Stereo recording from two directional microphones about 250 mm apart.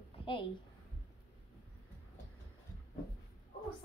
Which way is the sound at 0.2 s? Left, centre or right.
Centre.